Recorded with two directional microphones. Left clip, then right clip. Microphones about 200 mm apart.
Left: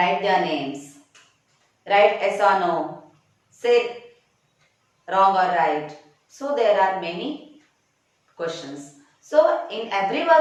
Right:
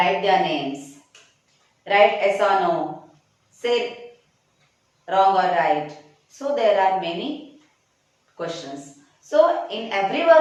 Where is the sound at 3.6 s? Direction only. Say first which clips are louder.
Left 3 dB; 5° right (ahead or behind).